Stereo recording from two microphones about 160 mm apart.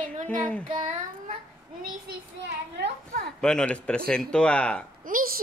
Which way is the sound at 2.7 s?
90° right.